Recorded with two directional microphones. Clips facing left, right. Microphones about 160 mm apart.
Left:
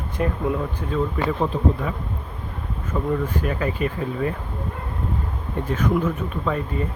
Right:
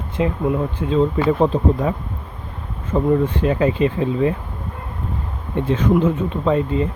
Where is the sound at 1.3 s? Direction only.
35° right (ahead or behind).